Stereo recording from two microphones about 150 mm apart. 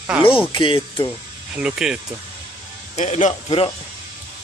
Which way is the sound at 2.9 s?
50° left (ahead or behind).